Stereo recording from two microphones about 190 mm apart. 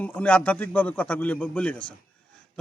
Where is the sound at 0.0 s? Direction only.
10° left (ahead or behind).